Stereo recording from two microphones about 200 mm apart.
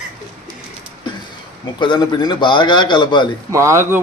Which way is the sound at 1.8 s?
20° left (ahead or behind).